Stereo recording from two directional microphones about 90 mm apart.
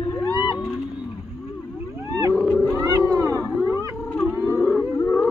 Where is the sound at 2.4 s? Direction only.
10° left (ahead or behind).